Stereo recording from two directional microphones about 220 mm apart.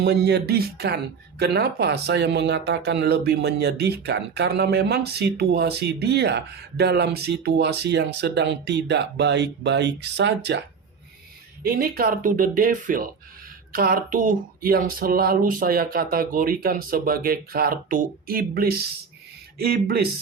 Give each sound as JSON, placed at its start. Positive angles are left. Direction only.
{"t": 0.0, "sound": "speech", "side_deg": -50}
{"t": 11.6, "sound": "speech", "side_deg": -45}